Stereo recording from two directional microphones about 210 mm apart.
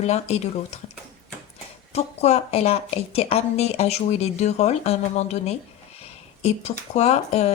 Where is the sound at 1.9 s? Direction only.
30° left (ahead or behind).